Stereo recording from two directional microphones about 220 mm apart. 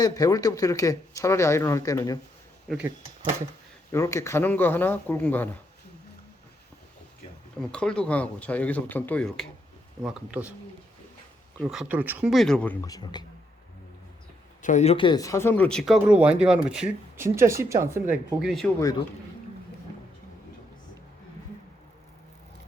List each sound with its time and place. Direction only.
0.0 s speech: 15° left (ahead or behind)
3.9 s speech: 15° left (ahead or behind)
7.7 s speech: 5° left (ahead or behind)
11.6 s speech: centre (ahead or behind); by 13.2 s 20° left (ahead or behind)
14.6 s speech: 35° left (ahead or behind); by 18.7 s centre (ahead or behind)